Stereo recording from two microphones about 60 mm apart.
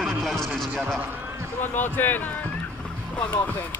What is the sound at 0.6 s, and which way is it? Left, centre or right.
Speech, centre.